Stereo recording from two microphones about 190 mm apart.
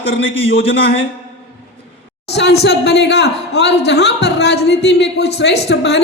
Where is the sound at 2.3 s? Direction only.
65° left (ahead or behind).